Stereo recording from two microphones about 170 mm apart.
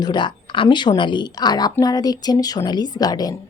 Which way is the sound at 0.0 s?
25° left (ahead or behind).